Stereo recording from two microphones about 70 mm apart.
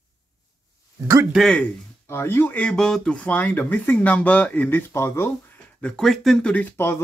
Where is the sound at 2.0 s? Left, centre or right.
Left.